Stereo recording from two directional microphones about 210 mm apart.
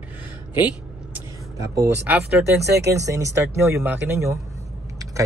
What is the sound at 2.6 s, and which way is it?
Speech, 55° right (ahead or behind).